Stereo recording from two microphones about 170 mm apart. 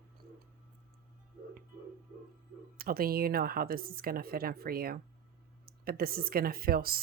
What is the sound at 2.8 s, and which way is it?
Speech, 60° right (ahead or behind).